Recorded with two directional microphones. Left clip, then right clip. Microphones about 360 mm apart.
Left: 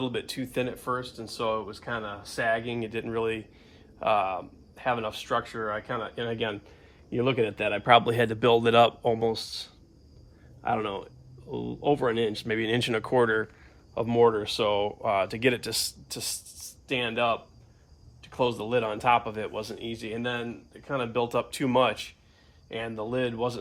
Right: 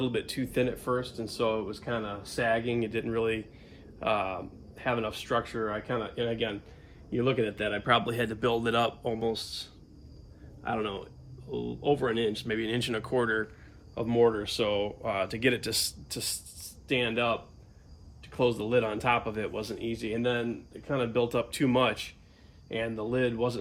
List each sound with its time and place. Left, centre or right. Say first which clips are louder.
0.0 s a man's voice: even; centre